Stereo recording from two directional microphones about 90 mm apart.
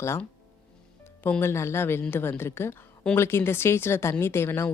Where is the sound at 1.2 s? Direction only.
25° left (ahead or behind).